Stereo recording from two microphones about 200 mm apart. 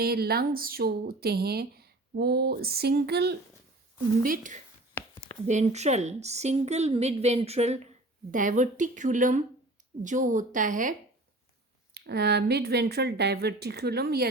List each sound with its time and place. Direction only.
0.0 s speech: 50° right (ahead or behind)
4.2 s a woman's voice: 40° right (ahead or behind)
11.9 s speech: 55° right (ahead or behind)